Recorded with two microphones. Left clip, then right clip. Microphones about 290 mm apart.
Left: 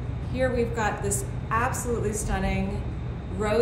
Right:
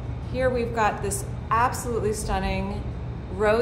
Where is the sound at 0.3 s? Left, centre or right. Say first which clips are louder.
Right 1 dB; centre.